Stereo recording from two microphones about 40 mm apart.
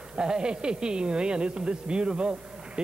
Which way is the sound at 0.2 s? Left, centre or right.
Right.